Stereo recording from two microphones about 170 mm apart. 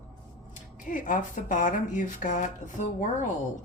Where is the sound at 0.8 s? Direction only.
50° left (ahead or behind).